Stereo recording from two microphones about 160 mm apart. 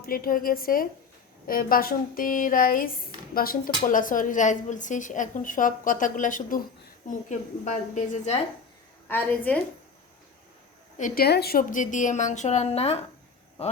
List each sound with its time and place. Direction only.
0.0 s a woman's voice: 65° left (ahead or behind); by 8.4 s 45° left (ahead or behind)
9.0 s a woman's voice: 10° left (ahead or behind)
10.9 s a woman's voice: 60° left (ahead or behind); by 13.1 s 40° left (ahead or behind)